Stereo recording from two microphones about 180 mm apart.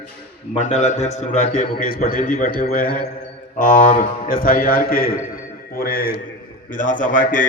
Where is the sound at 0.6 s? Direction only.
40° left (ahead or behind).